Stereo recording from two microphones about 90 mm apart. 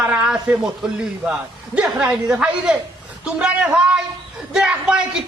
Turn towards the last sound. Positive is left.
turn(degrees=-10)  # may be behind; listen again after turning